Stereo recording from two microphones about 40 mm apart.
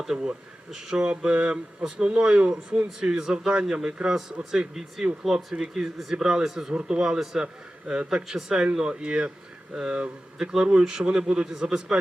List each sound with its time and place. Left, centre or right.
0.0 s speech: centre
5.2 s speech: centre
8.3 s speech: centre